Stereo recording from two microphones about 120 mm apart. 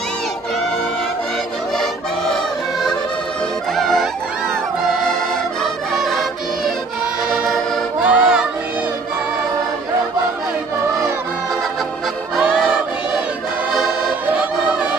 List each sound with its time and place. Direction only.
3.7 s music: centre (ahead or behind)
5.6 s music: centre (ahead or behind)
8.0 s music: 10° right (ahead or behind)
12.4 s music: 5° right (ahead or behind)